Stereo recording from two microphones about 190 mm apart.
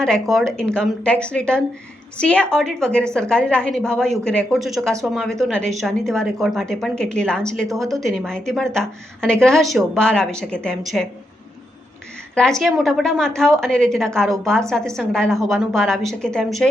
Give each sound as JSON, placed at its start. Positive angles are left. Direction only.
{"t": 0.0, "sound": "a woman's voice", "side_deg": 0}
{"t": 7.7, "sound": "speech", "side_deg": -15}
{"t": 8.0, "sound": "a woman's voice", "side_deg": 0}
{"t": 12.3, "sound": "a woman's voice", "side_deg": 5}